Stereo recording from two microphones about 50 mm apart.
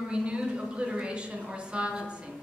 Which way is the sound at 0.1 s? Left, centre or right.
Right.